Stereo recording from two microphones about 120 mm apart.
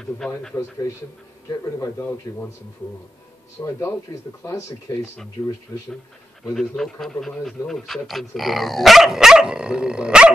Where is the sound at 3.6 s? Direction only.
25° left (ahead or behind).